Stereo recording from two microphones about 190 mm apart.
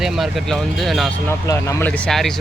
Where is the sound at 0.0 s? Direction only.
Centre (ahead or behind).